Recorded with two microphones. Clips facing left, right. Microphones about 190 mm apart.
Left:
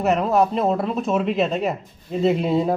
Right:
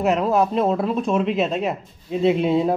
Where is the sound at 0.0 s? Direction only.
Centre (ahead or behind).